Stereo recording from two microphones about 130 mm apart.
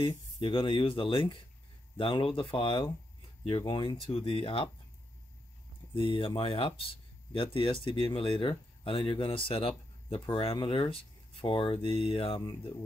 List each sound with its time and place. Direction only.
0.0 s speech: 35° left (ahead or behind)
6.0 s speech: 45° left (ahead or behind)